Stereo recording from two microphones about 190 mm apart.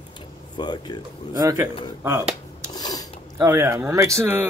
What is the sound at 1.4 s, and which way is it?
Speech, 15° right (ahead or behind).